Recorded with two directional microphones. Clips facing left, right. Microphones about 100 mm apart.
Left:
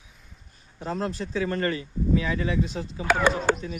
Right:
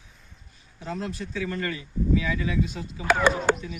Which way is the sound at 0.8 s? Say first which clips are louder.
Left 3 dB; 40° left (ahead or behind).